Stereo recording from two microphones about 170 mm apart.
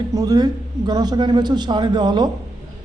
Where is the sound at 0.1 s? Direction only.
20° right (ahead or behind).